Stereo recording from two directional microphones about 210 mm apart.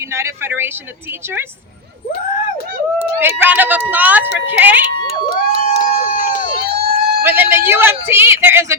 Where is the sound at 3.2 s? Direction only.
10° right (ahead or behind).